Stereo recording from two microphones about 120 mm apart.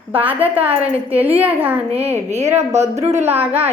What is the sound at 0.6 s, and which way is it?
Speech, 50° right (ahead or behind).